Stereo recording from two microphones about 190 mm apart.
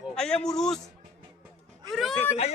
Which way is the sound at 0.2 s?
5° left (ahead or behind).